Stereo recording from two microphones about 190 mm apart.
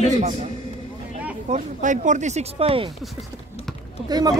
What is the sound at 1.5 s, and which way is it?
Speech, 40° right (ahead or behind).